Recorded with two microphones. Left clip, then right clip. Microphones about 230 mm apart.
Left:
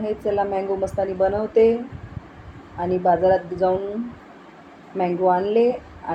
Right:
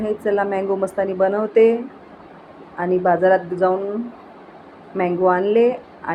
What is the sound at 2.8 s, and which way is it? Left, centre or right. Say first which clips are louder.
Speech: right 2 dB; centre.